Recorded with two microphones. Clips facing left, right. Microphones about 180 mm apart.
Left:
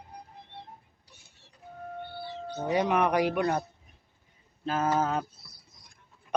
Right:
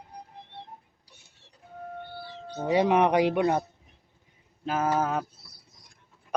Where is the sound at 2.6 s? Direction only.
25° right (ahead or behind).